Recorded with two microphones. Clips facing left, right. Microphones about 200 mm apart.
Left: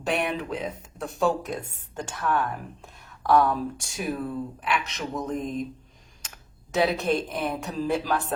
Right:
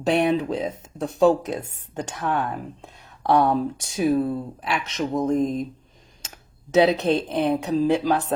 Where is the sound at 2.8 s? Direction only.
20° right (ahead or behind).